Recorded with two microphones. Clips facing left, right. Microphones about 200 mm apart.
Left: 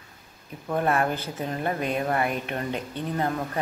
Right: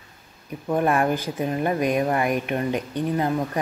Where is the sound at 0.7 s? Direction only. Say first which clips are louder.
Right 3 dB; 20° right (ahead or behind).